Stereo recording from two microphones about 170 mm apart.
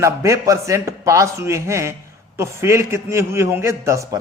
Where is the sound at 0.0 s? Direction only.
20° right (ahead or behind).